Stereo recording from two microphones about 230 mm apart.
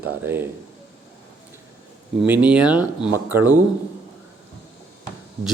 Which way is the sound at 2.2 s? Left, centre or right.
Centre.